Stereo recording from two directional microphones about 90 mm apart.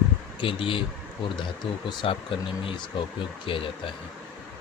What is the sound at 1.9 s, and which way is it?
Speech, 65° left (ahead or behind).